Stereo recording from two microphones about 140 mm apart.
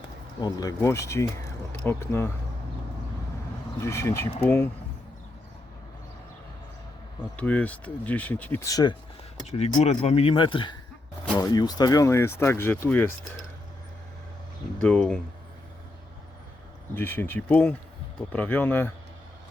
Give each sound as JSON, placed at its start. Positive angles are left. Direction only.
{"t": 0.4, "sound": "speech", "side_deg": 25}
{"t": 3.8, "sound": "speech", "side_deg": 20}
{"t": 7.3, "sound": "speech", "side_deg": 10}
{"t": 8.7, "sound": "speech", "side_deg": 30}
{"t": 9.5, "sound": "speech", "side_deg": 50}
{"t": 14.8, "sound": "speech", "side_deg": 5}
{"t": 16.9, "sound": "speech", "side_deg": 15}